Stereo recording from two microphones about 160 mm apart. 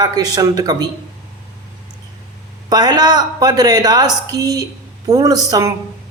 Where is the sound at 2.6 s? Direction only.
25° right (ahead or behind).